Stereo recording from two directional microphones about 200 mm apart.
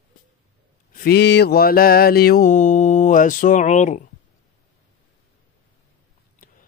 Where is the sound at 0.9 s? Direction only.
50° left (ahead or behind).